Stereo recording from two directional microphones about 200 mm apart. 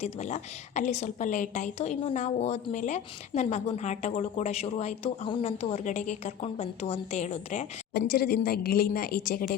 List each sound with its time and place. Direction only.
0.0 s a woman's voice: 35° left (ahead or behind)
7.9 s a woman's voice: 50° left (ahead or behind)